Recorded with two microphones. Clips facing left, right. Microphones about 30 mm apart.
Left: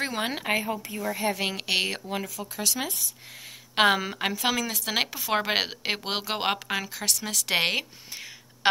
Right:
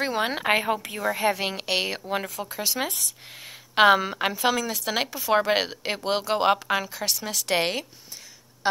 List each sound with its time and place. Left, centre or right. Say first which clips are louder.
0.0 s speech: right 3 dB; centre
0.5 s speech: right 4 dB; right
1.3 s a woman's voice: right 1 dB; centre
2.2 s speech: right 3 dB; right
2.5 s speech: even; centre
3.7 s a woman's voice: right 4 dB; centre
6.7 s a woman's voice: right 3 dB; centre
7.5 s speech: even; centre